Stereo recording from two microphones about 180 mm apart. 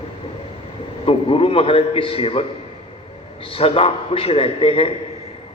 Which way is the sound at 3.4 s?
30° left (ahead or behind).